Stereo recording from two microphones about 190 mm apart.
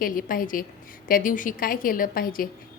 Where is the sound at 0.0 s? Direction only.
45° left (ahead or behind).